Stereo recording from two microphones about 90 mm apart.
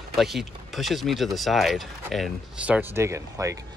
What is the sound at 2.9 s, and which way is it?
Speech, 30° right (ahead or behind).